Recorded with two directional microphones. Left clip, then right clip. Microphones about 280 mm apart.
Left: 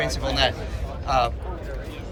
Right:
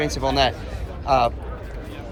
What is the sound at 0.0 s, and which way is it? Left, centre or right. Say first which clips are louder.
A man's voice: right 3 dB; centre.